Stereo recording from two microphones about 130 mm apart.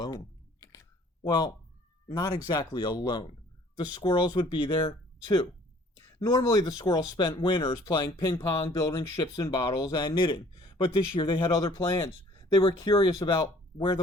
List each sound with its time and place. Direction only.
0.6 s a sound: 25° left (ahead or behind)
1.2 s speech: 30° left (ahead or behind)
6.0 s speech: 25° left (ahead or behind)
11.3 s speech: 25° left (ahead or behind)